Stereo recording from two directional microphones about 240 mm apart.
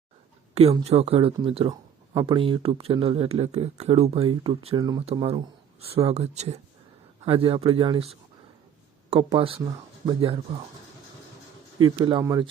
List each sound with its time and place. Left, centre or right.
0.5 s speech: right
11.9 s speech: centre